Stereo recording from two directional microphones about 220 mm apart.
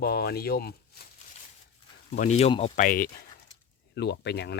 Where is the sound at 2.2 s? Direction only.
30° left (ahead or behind).